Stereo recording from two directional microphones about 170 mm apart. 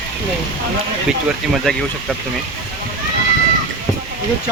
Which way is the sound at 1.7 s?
5° left (ahead or behind).